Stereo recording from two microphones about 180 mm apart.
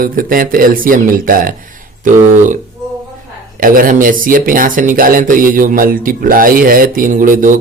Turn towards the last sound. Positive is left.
turn(degrees=-50)  # may be behind; listen again after turning